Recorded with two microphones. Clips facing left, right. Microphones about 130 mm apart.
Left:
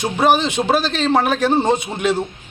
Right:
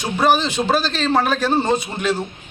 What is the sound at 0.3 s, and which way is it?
A man's voice, 20° left (ahead or behind).